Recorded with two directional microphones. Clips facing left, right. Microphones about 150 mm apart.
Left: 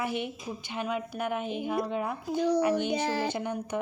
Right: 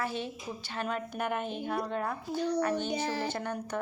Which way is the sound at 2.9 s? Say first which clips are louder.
Left 3 dB; 90° left.